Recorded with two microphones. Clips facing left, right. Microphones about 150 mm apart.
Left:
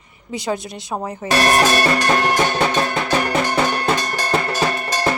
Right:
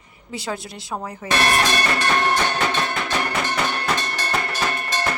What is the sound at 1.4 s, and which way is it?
Music, 40° left (ahead or behind).